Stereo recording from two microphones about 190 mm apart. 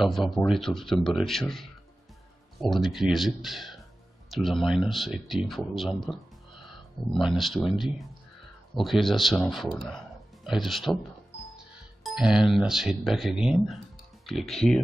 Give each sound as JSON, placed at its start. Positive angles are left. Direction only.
{"t": 0.0, "sound": "speech", "side_deg": 0}
{"t": 7.2, "sound": "speech", "side_deg": 0}